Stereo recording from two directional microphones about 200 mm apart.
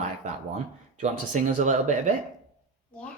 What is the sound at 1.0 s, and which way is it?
Speech, 35° right (ahead or behind).